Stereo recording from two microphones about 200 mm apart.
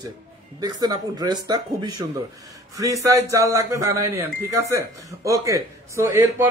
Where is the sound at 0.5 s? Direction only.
20° right (ahead or behind).